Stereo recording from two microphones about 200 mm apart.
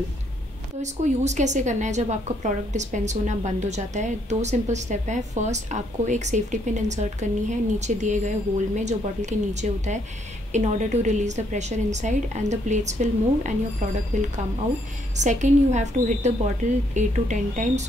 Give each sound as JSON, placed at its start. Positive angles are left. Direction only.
{"t": 0.8, "sound": "a woman's voice", "side_deg": -35}
{"t": 15.1, "sound": "a woman's voice", "side_deg": -35}